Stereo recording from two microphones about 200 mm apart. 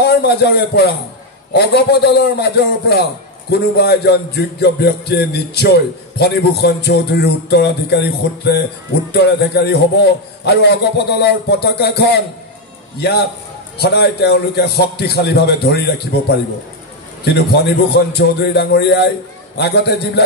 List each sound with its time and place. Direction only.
0.0 s a man's voice: 55° left (ahead or behind)